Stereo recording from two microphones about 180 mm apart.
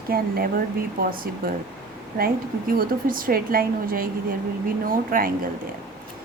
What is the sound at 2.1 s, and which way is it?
A woman's voice, 55° right (ahead or behind).